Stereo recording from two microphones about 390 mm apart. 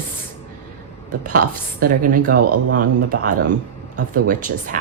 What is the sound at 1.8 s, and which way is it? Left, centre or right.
Speech, right.